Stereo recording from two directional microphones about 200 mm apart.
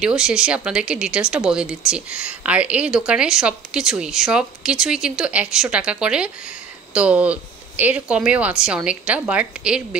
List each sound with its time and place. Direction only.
0.0 s a woman's voice: 5° right (ahead or behind)